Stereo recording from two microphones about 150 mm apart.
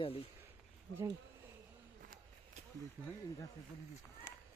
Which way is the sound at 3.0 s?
10° right (ahead or behind).